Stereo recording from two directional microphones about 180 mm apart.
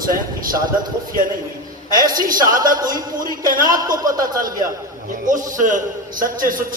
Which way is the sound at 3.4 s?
50° right (ahead or behind).